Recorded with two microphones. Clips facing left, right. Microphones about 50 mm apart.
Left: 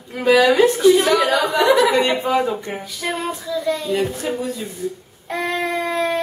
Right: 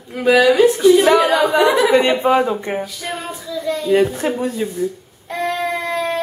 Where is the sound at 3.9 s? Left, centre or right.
Right.